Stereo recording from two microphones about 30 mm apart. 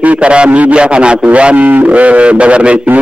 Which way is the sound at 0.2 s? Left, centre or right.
Right.